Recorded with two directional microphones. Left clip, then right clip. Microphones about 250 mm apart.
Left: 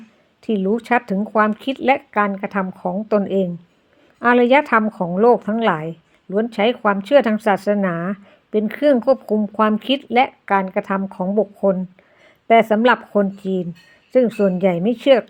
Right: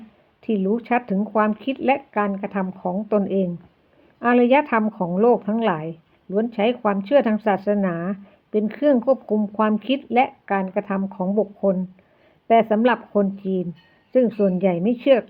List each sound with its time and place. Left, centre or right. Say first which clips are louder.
0.4 s a woman's voice: left 3 dB; left